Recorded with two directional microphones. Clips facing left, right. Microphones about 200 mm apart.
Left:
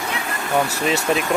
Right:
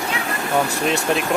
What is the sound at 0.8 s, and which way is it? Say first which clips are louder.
Speech: even; centre (ahead or behind).